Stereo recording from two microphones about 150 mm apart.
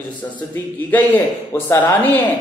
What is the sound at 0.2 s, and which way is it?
A man's voice, 20° left (ahead or behind).